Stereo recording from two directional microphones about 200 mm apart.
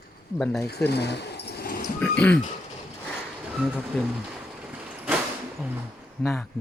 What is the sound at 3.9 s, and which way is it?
Speech, 5° left (ahead or behind).